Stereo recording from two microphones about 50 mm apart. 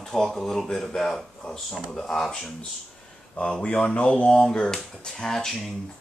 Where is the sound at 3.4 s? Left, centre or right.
Left.